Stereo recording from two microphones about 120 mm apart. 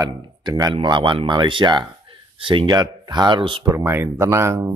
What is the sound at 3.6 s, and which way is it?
A man's voice, 15° right (ahead or behind).